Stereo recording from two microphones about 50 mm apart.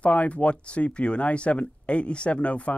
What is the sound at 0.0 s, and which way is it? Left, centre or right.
Speech, left.